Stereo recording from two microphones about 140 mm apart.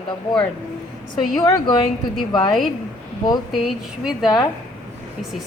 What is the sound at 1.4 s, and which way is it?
Speech, 30° left (ahead or behind).